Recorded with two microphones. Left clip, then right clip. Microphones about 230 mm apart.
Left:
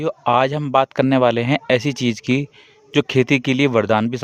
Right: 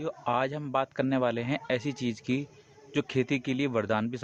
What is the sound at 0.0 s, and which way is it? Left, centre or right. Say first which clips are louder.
Speech: left 12 dB; left.